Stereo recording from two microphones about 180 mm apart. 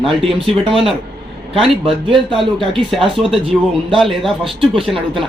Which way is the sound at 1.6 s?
30° right (ahead or behind).